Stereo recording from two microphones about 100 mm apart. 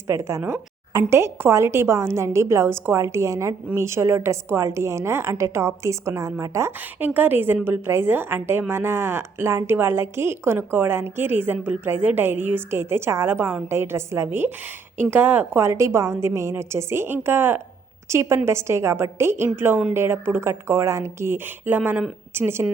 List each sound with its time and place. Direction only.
0.1 s a woman's voice: 30° right (ahead or behind)